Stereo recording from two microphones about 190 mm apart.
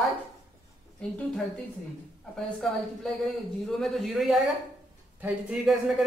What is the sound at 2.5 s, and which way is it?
A man's voice, centre (ahead or behind).